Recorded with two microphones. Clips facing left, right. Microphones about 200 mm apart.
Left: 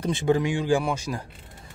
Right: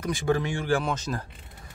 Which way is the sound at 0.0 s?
20° left (ahead or behind).